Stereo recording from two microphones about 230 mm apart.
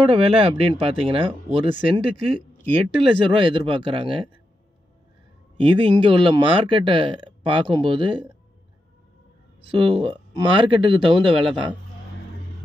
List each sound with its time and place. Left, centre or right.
0.0 s speech: right
5.6 s speech: right
9.7 s speech: right